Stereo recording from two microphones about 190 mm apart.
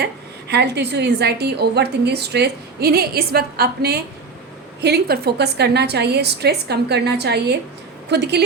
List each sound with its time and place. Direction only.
0.0 s a woman's voice: 60° right (ahead or behind)